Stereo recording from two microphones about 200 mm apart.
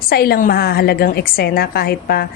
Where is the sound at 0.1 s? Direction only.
50° left (ahead or behind).